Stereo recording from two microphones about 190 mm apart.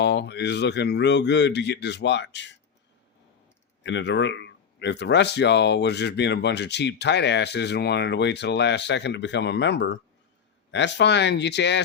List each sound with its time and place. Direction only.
0.0 s speech: 60° left (ahead or behind)
3.8 s speech: 70° left (ahead or behind)